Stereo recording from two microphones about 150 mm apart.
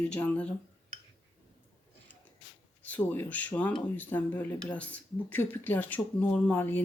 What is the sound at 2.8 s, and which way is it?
Speech, 10° left (ahead or behind).